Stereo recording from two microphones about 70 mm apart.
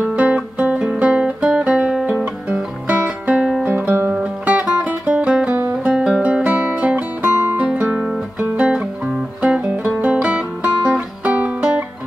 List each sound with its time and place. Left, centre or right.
0.0 s guitar: centre
1.6 s music: centre
2.9 s music: right
4.1 s music: centre